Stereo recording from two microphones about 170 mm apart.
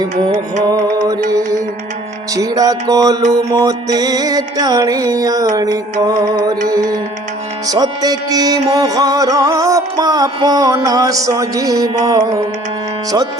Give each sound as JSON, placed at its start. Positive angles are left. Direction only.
{"t": 2.3, "sound": "music", "side_deg": -20}